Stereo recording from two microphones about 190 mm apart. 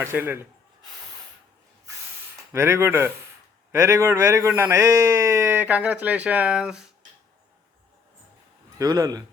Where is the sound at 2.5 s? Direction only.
15° right (ahead or behind).